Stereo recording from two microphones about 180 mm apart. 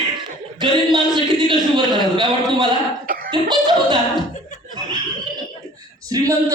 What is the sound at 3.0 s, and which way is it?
Cough, 55° right (ahead or behind).